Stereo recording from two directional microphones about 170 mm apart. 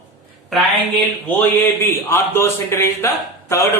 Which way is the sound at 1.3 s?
10° left (ahead or behind).